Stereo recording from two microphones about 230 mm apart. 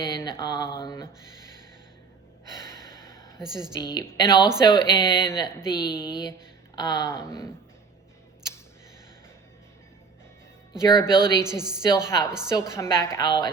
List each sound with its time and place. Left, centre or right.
0.0 s speech: centre
3.4 s a woman's voice: centre
3.9 s speech: centre
10.8 s speech: centre
11.6 s a woman's voice: centre
12.0 s speech: centre